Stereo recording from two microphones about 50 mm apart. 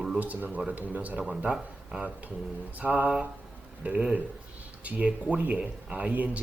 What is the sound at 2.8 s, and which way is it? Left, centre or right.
Speech, right.